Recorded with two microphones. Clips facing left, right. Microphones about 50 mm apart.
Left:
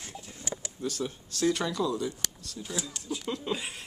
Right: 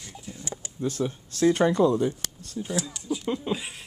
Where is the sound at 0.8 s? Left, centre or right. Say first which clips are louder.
Right 6 dB; right.